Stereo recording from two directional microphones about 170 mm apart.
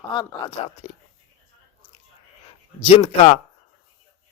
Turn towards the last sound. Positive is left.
turn(degrees=40)  # may be behind; listen again after turning